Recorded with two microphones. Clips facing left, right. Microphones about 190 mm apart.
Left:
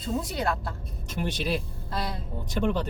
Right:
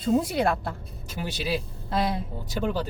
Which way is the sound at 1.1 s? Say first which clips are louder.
Even; 5° right (ahead or behind).